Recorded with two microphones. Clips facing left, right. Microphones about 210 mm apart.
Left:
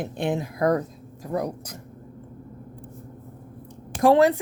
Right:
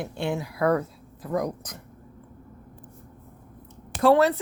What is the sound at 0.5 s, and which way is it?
Speech, 40° left (ahead or behind).